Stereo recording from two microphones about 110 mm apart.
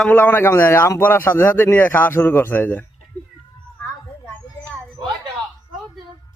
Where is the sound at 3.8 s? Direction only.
20° left (ahead or behind).